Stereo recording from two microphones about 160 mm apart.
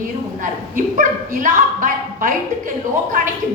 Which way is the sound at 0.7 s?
55° right (ahead or behind).